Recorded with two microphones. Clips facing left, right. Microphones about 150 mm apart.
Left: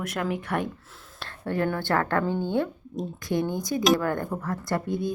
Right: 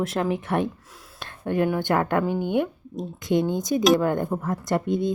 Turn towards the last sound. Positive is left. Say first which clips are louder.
# right 4 dB
turn(degrees=-20)  # may be behind; listen again after turning